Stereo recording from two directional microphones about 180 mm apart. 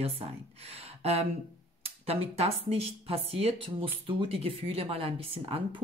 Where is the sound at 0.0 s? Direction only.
35° right (ahead or behind).